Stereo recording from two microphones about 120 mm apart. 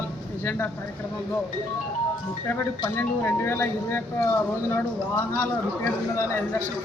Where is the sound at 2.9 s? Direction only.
20° left (ahead or behind).